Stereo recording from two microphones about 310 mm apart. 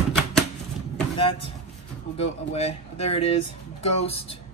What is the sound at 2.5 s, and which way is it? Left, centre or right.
Speech, centre.